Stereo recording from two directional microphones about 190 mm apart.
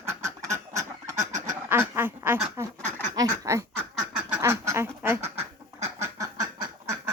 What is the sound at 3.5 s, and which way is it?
Speech, 15° right (ahead or behind).